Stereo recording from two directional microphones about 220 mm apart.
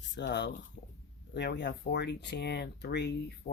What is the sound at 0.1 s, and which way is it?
Speech, 50° left (ahead or behind).